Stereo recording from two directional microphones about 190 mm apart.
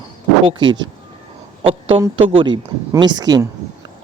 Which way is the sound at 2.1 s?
30° right (ahead or behind).